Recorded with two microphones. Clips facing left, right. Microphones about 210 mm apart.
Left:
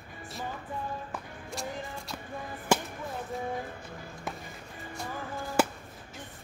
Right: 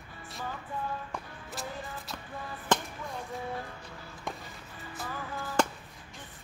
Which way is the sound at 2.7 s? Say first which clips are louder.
Left 2 dB; 10° left (ahead or behind).